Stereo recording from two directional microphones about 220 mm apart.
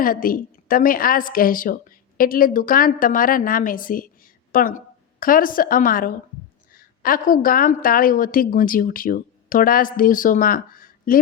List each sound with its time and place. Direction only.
0.0 s a woman's voice: 40° left (ahead or behind)